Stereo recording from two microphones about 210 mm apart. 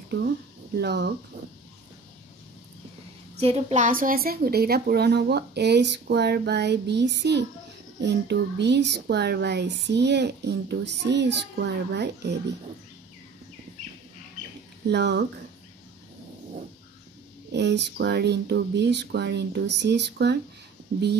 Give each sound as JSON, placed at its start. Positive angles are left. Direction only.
{"t": 0.7, "sound": "a woman's voice", "side_deg": -50}
{"t": 3.3, "sound": "a woman's voice", "side_deg": -30}
{"t": 14.9, "sound": "speech", "side_deg": -55}
{"t": 17.5, "sound": "speech", "side_deg": -55}